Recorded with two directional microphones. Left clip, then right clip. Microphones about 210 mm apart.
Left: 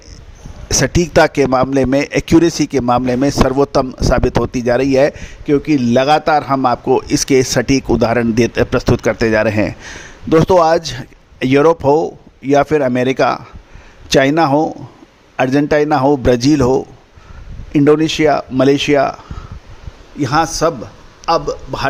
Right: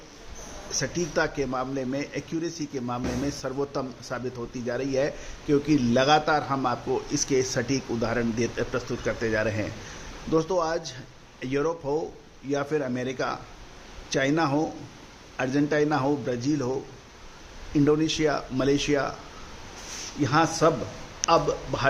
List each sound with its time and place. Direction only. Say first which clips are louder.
0.7 s a man's voice: left 15 dB; 55° left (ahead or behind)
20.2 s a man's voice: left 8 dB; 45° left (ahead or behind)